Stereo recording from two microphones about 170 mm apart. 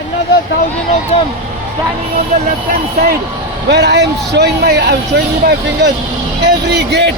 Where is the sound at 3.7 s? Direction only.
80° right.